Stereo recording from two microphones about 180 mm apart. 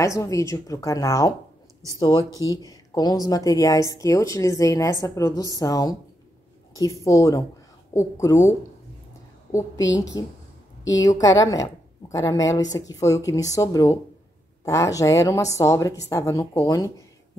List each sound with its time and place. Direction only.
0.0 s a woman's voice: 15° left (ahead or behind)
9.5 s a woman's voice: 15° left (ahead or behind)